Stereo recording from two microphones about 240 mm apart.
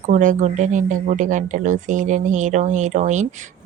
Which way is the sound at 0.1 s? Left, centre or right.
Right.